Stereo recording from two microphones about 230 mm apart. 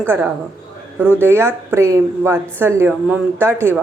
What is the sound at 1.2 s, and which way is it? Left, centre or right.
A woman's voice, centre.